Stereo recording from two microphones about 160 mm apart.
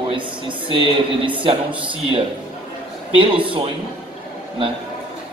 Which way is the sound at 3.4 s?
30° right (ahead or behind).